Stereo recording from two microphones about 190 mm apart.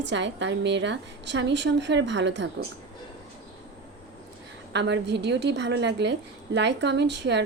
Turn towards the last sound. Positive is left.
turn(degrees=-65)  # may be behind; listen again after turning